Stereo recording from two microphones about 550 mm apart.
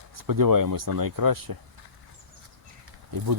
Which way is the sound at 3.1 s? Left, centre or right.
Right.